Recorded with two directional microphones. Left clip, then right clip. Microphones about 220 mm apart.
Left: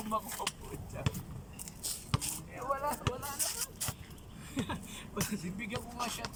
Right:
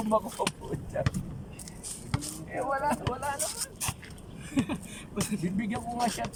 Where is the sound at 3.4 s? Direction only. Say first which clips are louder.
Right 3 dB; 20° right (ahead or behind).